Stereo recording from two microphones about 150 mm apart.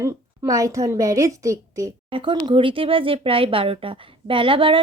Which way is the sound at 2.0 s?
35° right (ahead or behind).